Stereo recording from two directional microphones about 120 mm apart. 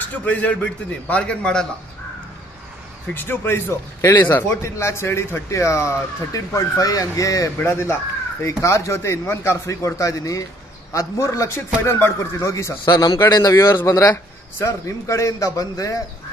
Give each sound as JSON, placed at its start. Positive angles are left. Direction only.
{"t": 0.1, "sound": "a man's voice", "side_deg": 10}
{"t": 3.1, "sound": "a man's voice", "side_deg": 20}
{"t": 12.8, "sound": "a man's voice", "side_deg": 35}